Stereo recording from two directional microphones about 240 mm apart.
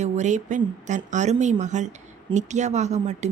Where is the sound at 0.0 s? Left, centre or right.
Right.